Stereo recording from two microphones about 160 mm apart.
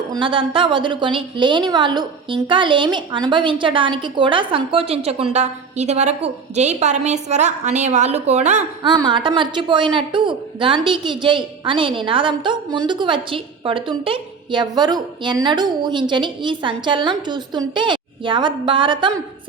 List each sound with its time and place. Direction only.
0.1 s a woman's voice: 30° right (ahead or behind)
8.8 s a woman's voice: 30° right (ahead or behind)